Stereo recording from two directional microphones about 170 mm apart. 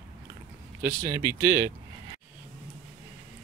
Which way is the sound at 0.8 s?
15° right (ahead or behind).